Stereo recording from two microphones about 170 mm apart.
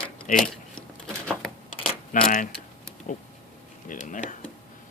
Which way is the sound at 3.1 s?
55° left (ahead or behind).